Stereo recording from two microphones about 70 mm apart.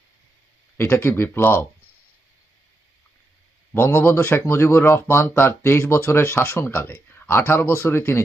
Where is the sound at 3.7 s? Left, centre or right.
Left.